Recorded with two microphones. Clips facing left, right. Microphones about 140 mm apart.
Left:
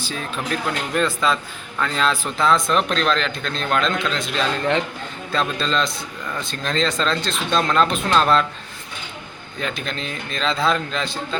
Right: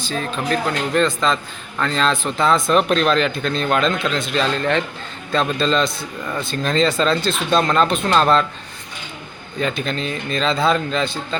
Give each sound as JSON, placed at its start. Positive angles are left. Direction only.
{"t": 0.0, "sound": "a man's voice", "side_deg": 10}
{"t": 4.5, "sound": "speech", "side_deg": 15}
{"t": 5.3, "sound": "a man's voice", "side_deg": 0}
{"t": 9.6, "sound": "a man's voice", "side_deg": 0}